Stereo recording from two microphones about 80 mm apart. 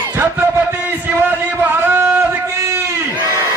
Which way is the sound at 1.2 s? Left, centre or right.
Right.